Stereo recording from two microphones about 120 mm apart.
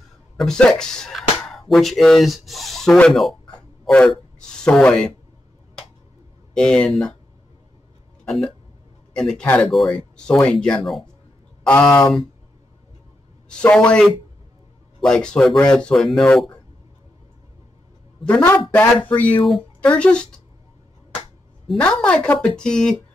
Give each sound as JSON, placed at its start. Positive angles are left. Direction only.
{"t": 0.4, "sound": "speech", "side_deg": 5}
{"t": 6.5, "sound": "speech", "side_deg": 5}
{"t": 9.1, "sound": "speech", "side_deg": 5}
{"t": 11.6, "sound": "speech", "side_deg": 10}
{"t": 13.5, "sound": "speech", "side_deg": 10}
{"t": 18.2, "sound": "speech", "side_deg": 15}
{"t": 21.6, "sound": "speech", "side_deg": 10}